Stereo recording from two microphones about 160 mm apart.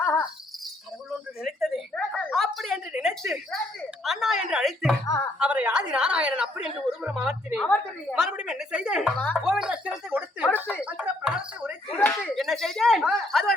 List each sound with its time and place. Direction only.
0.0 s insect: 15° left (ahead or behind)
1.5 s a sound: centre (ahead or behind)
4.0 s speech: centre (ahead or behind)
5.0 s speech: 15° left (ahead or behind)
5.4 s speech: 10° right (ahead or behind)
9.1 s speech: 10° left (ahead or behind)
9.4 s speech: 5° right (ahead or behind)